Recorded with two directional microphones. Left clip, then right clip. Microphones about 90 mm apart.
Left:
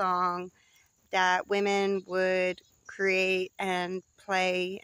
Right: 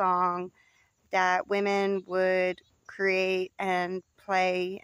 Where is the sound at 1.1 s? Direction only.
40° right (ahead or behind).